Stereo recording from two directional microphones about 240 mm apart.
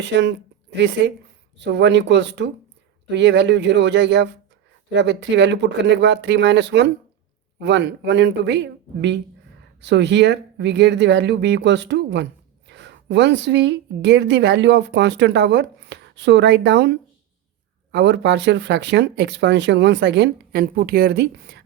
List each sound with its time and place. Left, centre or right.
0.0 s speech: right